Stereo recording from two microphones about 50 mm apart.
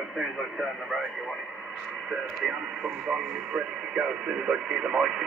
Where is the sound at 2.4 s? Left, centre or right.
Centre.